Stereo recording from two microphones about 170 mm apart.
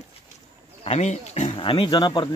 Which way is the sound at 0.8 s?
40° left (ahead or behind).